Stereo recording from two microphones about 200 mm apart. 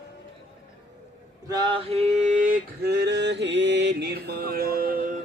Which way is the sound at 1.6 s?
25° right (ahead or behind).